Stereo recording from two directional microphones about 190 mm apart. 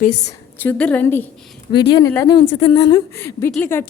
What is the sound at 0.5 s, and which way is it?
Speech, 10° left (ahead or behind).